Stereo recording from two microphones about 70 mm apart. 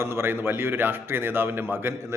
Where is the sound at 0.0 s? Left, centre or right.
Right.